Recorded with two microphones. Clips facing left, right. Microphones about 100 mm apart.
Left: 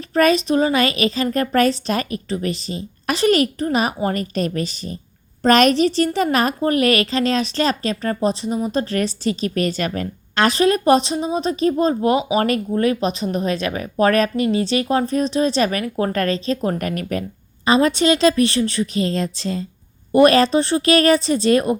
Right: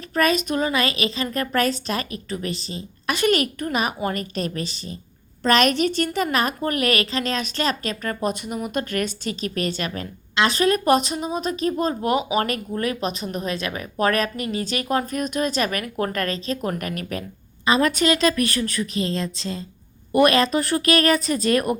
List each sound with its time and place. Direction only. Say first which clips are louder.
0.1 s speech: left 5 dB; 35° left (ahead or behind)
2.6 s a woman's voice: left 5 dB; 35° right (ahead or behind)
3.1 s speech: left 4 dB; 35° left (ahead or behind)
17.7 s a woman's voice: left 4 dB; 30° left (ahead or behind)